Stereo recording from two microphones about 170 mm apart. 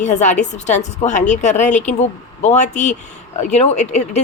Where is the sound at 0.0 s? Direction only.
45° left (ahead or behind).